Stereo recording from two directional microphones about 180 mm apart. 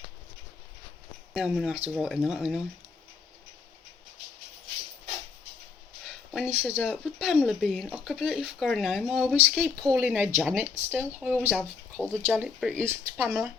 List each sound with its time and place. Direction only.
1.3 s speech: 5° right (ahead or behind)
6.1 s speech: 5° right (ahead or behind)
11.9 s speech: 10° left (ahead or behind)
12.4 s speech: 10° right (ahead or behind)